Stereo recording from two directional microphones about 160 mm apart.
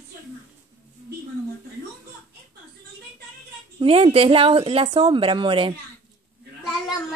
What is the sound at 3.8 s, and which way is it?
A woman's voice, 35° right (ahead or behind).